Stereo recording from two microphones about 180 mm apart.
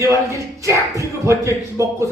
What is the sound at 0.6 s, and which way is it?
A man's voice, 15° right (ahead or behind).